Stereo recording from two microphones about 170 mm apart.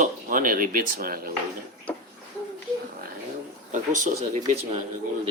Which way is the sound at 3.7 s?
50° right (ahead or behind).